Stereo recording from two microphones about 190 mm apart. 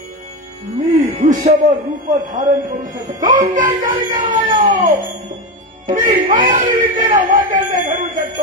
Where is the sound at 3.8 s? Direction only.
40° right (ahead or behind).